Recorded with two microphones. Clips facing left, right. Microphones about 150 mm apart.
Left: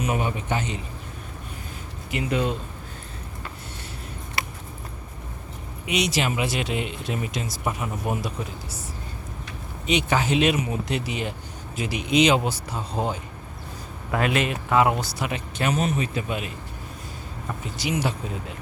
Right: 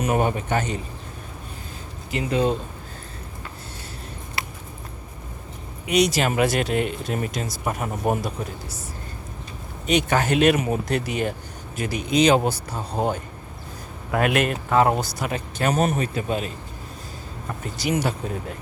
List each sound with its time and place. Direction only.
0.0 s speech: 45° right (ahead or behind)
2.0 s speech: 30° right (ahead or behind)
5.9 s speech: 40° right (ahead or behind)
9.8 s speech: 45° right (ahead or behind)
14.2 s speech: 55° right (ahead or behind)
17.6 s speech: 45° right (ahead or behind)